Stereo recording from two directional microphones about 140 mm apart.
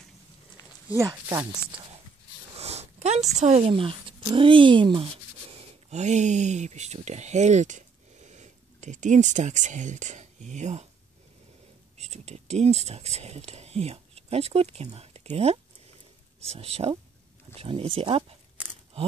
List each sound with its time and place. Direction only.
0.9 s speech: 20° right (ahead or behind)
2.5 s a sound: 50° right (ahead or behind)
4.2 s speech: 35° right (ahead or behind)
5.5 s speech: 50° right (ahead or behind)
12.0 s speech: 50° right (ahead or behind)
18.6 s a sound: 10° right (ahead or behind)